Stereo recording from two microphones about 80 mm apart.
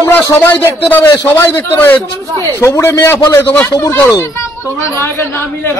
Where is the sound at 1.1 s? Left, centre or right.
Left.